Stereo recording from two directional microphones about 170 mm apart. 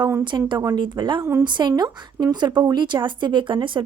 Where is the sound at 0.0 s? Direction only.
15° right (ahead or behind).